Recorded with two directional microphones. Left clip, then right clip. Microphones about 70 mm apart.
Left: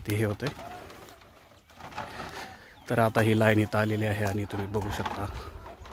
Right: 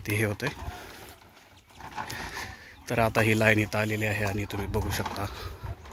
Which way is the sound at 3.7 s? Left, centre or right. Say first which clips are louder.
Even; left.